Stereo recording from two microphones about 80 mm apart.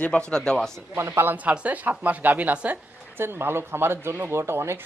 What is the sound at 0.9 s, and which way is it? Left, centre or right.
Speech, right.